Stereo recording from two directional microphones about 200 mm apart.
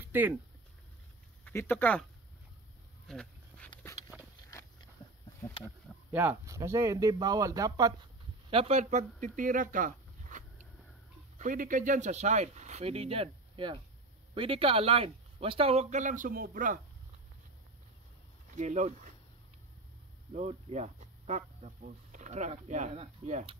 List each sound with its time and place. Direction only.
0.0 s speech: 10° right (ahead or behind)
1.4 s speech: 10° left (ahead or behind)
3.1 s a sound: 5° left (ahead or behind)
4.5 s a sound: 15° left (ahead or behind)
6.1 s speech: 10° right (ahead or behind)
8.5 s speech: 30° right (ahead or behind)
18.5 s speech: 35° right (ahead or behind)
20.3 s speech: 35° right (ahead or behind)